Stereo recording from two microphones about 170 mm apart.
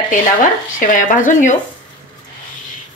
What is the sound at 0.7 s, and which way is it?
Speech, 50° left (ahead or behind).